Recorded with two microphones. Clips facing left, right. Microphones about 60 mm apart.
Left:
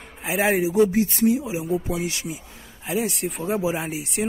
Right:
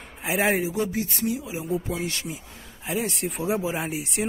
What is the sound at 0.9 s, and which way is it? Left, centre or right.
Speech, left.